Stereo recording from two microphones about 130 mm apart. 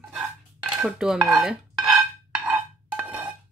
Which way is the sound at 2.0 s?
10° right (ahead or behind).